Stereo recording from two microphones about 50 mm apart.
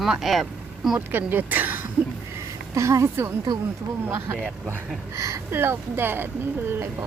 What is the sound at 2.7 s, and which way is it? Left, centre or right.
Speech, right.